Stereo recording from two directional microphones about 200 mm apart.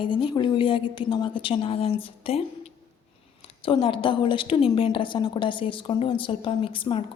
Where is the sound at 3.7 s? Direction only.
25° left (ahead or behind).